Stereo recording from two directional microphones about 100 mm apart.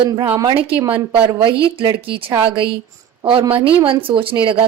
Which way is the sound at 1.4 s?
60° right (ahead or behind).